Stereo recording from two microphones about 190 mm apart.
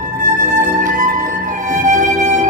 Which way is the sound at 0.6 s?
40° right (ahead or behind).